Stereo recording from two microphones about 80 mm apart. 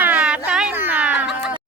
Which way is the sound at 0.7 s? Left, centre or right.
Right.